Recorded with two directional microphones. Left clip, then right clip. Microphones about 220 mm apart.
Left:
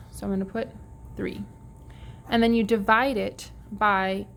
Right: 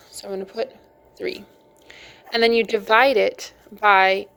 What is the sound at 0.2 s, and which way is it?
A woman's voice, 20° right (ahead or behind).